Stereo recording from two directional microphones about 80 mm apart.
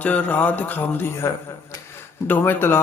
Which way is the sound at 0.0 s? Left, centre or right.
Left.